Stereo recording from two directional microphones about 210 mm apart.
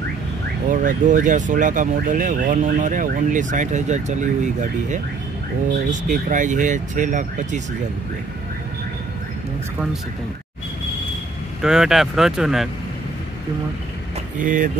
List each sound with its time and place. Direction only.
0.7 s speech: 40° right (ahead or behind)
11.6 s speech: 5° right (ahead or behind)
14.4 s speech: 40° right (ahead or behind)